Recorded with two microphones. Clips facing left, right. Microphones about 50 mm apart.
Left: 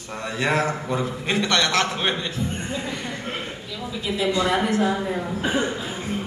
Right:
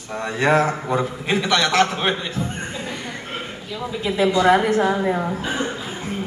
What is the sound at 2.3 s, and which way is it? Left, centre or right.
Speech, right.